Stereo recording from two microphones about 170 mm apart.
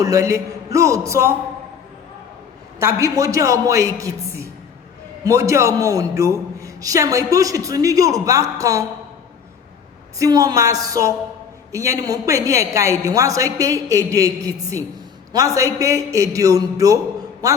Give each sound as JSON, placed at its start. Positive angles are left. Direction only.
{"t": 0.0, "sound": "a sound", "side_deg": -20}
{"t": 2.7, "sound": "a man's voice", "side_deg": -15}
{"t": 10.2, "sound": "a man's voice", "side_deg": -20}